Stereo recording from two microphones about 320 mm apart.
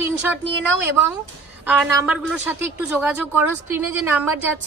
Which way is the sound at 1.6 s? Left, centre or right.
Centre.